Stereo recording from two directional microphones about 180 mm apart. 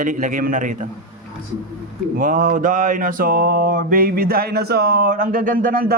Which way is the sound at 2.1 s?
45° right (ahead or behind).